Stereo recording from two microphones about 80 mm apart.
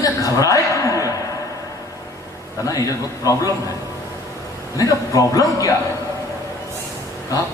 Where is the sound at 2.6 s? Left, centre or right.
Left.